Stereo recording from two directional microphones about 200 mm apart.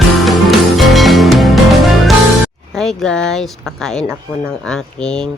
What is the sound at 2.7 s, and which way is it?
Speech, centre (ahead or behind).